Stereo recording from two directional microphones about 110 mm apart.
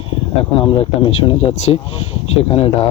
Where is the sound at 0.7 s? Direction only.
50° left (ahead or behind).